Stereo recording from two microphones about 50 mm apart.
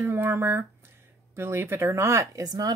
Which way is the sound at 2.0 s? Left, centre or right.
Right.